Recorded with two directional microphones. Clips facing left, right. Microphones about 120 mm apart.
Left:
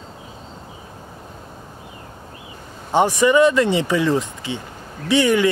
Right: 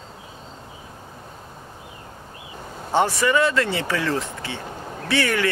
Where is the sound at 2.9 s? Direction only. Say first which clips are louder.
Left 4 dB; 15° left (ahead or behind).